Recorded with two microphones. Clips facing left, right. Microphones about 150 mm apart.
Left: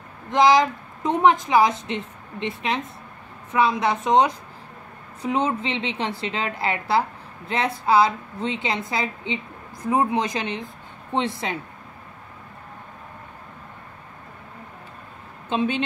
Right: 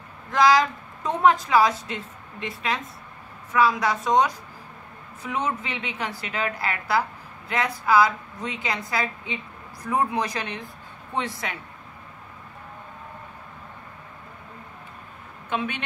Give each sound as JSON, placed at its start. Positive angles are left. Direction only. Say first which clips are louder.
{"t": 0.3, "sound": "a woman's voice", "louder": "left 2 dB", "side_deg": 20}
{"t": 15.5, "sound": "a woman's voice", "louder": "left 5 dB", "side_deg": 25}